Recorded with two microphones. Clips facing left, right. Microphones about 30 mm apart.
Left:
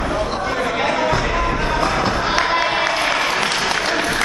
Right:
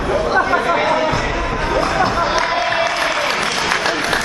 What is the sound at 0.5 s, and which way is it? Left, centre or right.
Music, centre.